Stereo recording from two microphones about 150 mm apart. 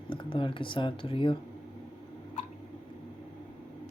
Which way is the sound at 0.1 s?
35° left (ahead or behind).